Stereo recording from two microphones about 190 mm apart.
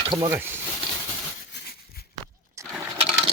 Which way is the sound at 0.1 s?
20° right (ahead or behind).